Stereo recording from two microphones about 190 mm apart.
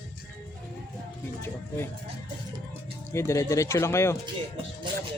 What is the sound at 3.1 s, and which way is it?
Speech, 15° left (ahead or behind).